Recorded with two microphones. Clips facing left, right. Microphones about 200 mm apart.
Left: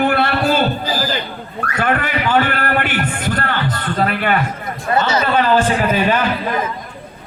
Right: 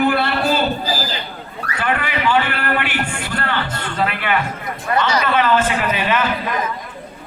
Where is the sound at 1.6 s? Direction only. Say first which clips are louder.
Left 3 dB; 45° left (ahead or behind).